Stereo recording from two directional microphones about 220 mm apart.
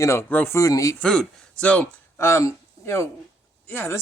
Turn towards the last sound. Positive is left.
turn(degrees=10)  # may be behind; listen again after turning